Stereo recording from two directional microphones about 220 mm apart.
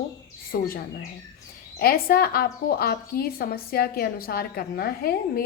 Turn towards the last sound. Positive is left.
turn(degrees=45)  # may be behind; listen again after turning